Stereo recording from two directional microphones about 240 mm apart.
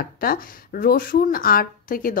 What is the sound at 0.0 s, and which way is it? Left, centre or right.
A woman's voice, left.